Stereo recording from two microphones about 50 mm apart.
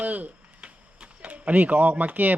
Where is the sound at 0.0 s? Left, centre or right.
Right.